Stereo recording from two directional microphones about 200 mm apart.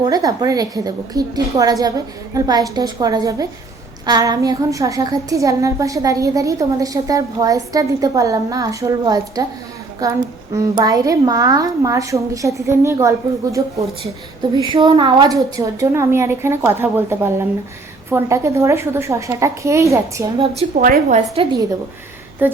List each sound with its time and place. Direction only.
0.0 s a woman's voice: 20° right (ahead or behind)
20.6 s a woman's voice: 40° right (ahead or behind)
21.4 s a woman's voice: 25° right (ahead or behind)
22.4 s a woman's voice: 10° right (ahead or behind)